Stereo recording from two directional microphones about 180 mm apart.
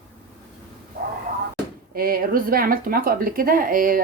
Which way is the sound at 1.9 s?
55° right (ahead or behind).